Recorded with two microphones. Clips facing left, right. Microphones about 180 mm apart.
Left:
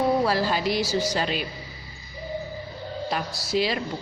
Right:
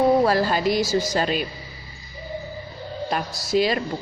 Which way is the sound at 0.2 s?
50° right (ahead or behind).